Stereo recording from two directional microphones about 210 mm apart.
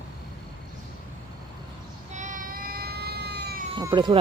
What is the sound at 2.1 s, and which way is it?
Baby cry, 35° right (ahead or behind).